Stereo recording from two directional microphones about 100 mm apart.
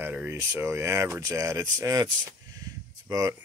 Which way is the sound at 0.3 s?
25° right (ahead or behind).